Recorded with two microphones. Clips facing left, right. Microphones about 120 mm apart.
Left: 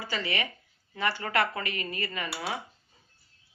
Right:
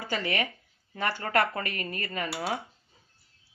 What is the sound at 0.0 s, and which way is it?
Speech, 50° right (ahead or behind).